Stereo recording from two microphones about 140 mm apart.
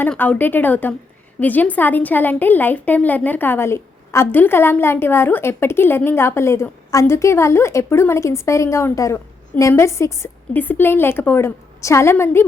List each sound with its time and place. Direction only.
0.0 s a woman's voice: 10° left (ahead or behind)